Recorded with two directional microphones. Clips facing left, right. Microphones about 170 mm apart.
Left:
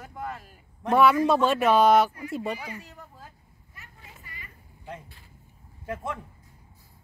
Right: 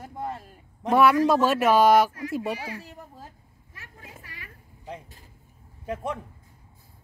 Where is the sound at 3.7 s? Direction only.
90° right.